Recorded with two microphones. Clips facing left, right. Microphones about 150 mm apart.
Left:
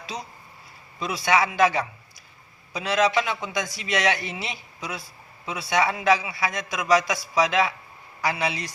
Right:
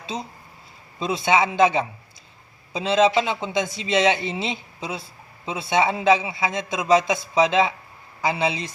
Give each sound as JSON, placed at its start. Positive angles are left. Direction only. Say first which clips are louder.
{"t": 0.0, "sound": "speech", "louder": "right 4 dB", "side_deg": -25}